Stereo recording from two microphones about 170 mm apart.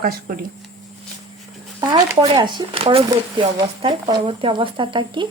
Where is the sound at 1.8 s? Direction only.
25° right (ahead or behind).